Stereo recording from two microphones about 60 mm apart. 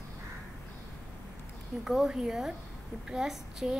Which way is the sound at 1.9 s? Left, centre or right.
Centre.